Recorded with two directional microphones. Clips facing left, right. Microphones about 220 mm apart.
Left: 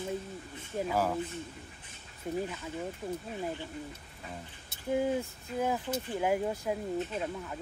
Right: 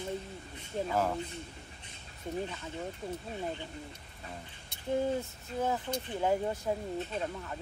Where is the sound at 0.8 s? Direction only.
5° left (ahead or behind).